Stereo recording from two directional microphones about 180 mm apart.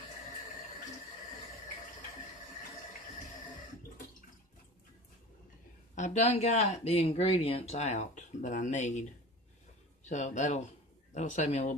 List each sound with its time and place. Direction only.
5.9 s speech: 40° left (ahead or behind)
10.0 s speech: 45° left (ahead or behind)